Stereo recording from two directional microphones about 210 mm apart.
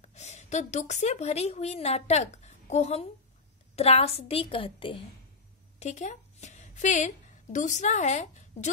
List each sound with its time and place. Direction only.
0.1 s a woman's voice: 30° left (ahead or behind)
5.8 s a sound: 35° left (ahead or behind)
7.5 s a woman's voice: 35° left (ahead or behind)